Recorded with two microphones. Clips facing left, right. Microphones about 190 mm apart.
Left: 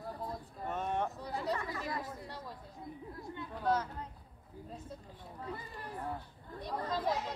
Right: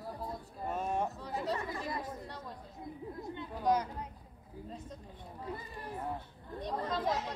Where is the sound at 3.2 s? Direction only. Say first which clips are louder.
Even; 20° right (ahead or behind).